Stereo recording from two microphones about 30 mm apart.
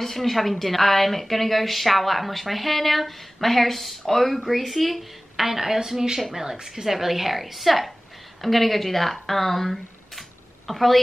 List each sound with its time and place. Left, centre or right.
0.0 s a woman's voice: centre
5.5 s a woman's voice: centre